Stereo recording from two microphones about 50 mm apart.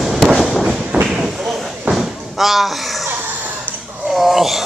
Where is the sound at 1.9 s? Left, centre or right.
Centre.